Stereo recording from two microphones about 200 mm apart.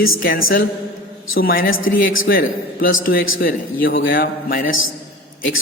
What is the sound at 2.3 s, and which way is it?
A man's voice, 45° left (ahead or behind).